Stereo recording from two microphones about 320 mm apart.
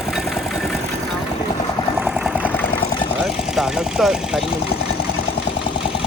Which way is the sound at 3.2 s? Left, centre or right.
Centre.